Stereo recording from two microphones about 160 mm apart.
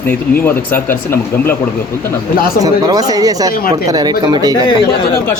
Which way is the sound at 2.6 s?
25° right (ahead or behind).